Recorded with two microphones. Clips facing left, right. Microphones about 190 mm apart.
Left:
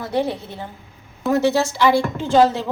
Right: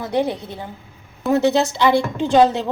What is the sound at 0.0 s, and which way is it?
A woman's voice, 15° right (ahead or behind).